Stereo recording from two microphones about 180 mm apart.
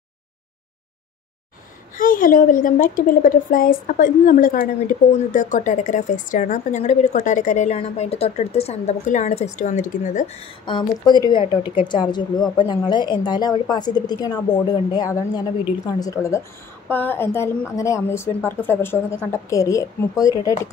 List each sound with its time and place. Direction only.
2.0 s a woman's voice: 50° left (ahead or behind)
10.6 s a woman's voice: 25° left (ahead or behind)